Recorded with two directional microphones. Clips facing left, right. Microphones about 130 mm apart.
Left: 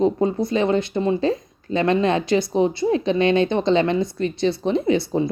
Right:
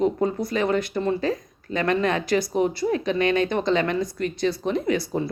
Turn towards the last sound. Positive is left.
turn(degrees=25)  # may be behind; listen again after turning